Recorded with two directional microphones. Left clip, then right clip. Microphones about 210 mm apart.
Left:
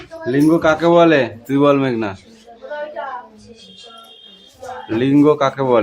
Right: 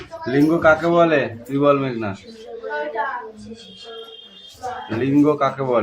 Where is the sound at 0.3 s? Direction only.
30° left (ahead or behind).